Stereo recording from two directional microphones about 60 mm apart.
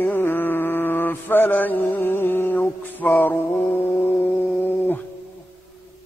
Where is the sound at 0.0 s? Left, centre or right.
Left.